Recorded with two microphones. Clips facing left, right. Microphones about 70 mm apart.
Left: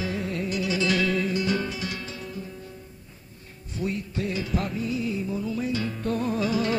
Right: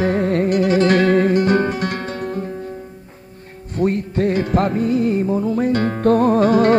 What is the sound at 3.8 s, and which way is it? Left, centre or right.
Music, right.